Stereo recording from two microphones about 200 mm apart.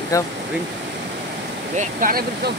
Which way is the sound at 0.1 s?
15° left (ahead or behind).